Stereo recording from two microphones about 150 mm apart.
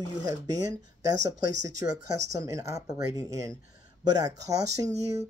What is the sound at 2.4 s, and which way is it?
Speech, 20° right (ahead or behind).